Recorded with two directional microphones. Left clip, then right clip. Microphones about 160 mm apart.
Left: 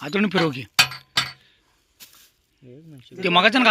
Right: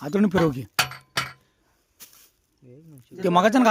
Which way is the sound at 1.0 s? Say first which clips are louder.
Left 4 dB; 25° right (ahead or behind).